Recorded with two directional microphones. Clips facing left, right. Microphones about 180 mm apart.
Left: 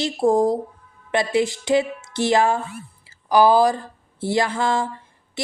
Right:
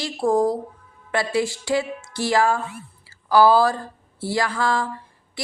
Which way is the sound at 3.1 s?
15° left (ahead or behind).